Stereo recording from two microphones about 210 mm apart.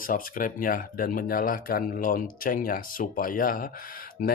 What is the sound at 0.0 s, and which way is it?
Speech, 40° left (ahead or behind).